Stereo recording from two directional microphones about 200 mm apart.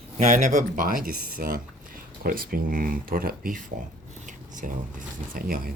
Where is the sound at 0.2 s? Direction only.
35° right (ahead or behind).